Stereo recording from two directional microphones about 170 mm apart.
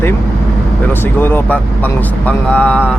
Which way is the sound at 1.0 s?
10° left (ahead or behind).